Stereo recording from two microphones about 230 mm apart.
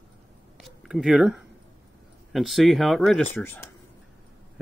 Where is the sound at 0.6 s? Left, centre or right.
Centre.